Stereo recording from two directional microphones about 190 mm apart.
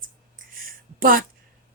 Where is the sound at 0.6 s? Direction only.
50° right (ahead or behind).